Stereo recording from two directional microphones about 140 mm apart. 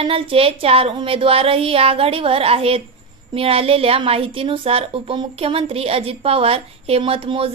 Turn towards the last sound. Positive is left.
turn(degrees=-40)  # may be behind; listen again after turning